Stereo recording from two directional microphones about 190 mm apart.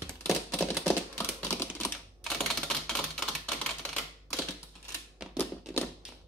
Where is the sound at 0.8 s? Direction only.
10° left (ahead or behind).